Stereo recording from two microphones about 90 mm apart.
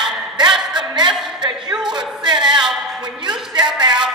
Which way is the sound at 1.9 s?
55° right (ahead or behind).